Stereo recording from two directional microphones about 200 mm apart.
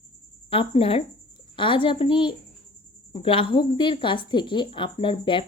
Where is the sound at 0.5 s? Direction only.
25° left (ahead or behind).